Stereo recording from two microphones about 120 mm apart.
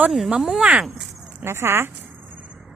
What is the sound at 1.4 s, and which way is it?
Speech, 20° right (ahead or behind).